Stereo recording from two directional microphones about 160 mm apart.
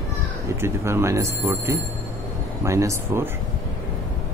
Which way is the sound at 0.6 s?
15° right (ahead or behind).